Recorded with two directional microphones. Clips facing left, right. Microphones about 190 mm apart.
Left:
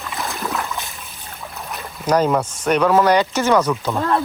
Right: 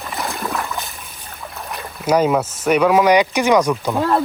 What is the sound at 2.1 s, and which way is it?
Speech, 10° right (ahead or behind).